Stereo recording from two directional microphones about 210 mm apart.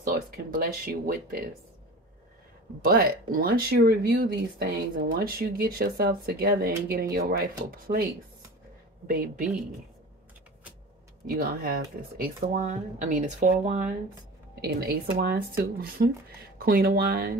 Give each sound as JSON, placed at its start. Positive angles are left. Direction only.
{"t": 0.0, "sound": "speech", "side_deg": -40}
{"t": 2.8, "sound": "speech", "side_deg": -45}
{"t": 11.2, "sound": "speech", "side_deg": -45}
{"t": 14.6, "sound": "speech", "side_deg": -50}